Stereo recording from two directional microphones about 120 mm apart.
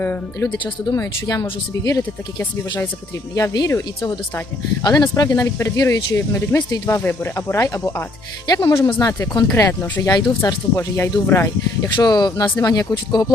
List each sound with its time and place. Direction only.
0.0 s speech: 15° left (ahead or behind)
0.5 s speech: 35° left (ahead or behind)
3.3 s speech: 30° left (ahead or behind)
10.8 s speech: 20° left (ahead or behind)
12.0 s speech: 35° left (ahead or behind)